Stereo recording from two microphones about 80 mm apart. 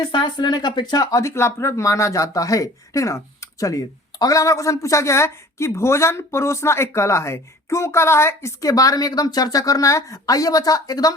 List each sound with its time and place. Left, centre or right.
0.0 s speech: left